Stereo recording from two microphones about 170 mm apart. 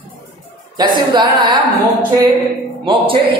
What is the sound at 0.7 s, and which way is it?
Speech, 25° right (ahead or behind).